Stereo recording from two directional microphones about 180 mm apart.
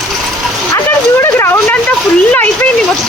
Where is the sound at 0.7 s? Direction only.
15° left (ahead or behind).